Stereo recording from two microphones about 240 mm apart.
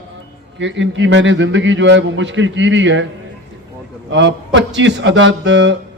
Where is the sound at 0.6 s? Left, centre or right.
Right.